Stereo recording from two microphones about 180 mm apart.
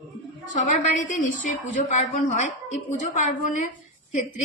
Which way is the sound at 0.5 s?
45° left (ahead or behind).